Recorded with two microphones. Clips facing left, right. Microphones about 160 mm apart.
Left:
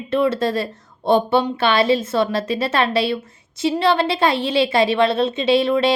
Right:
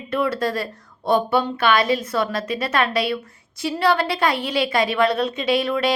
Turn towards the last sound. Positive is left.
turn(degrees=25)  # may be behind; listen again after turning